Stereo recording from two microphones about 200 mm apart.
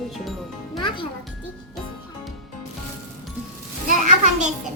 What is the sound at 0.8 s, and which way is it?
Music, 25° left (ahead or behind).